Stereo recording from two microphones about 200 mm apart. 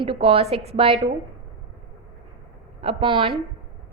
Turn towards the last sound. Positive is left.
turn(degrees=-25)  # may be behind; listen again after turning